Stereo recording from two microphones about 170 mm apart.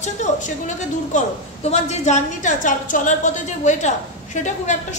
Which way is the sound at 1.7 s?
40° left (ahead or behind).